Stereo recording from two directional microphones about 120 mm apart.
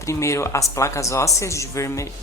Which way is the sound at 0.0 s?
25° left (ahead or behind).